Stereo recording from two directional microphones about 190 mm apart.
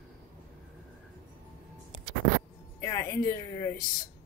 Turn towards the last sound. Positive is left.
turn(degrees=15)  # may be behind; listen again after turning